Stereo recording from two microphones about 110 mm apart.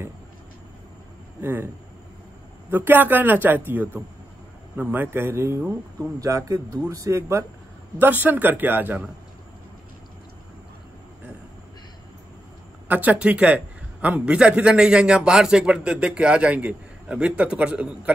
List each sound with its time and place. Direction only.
1.4 s speech: 20° right (ahead or behind)
2.7 s a man's voice: 20° right (ahead or behind)
12.8 s a man's voice: 15° right (ahead or behind)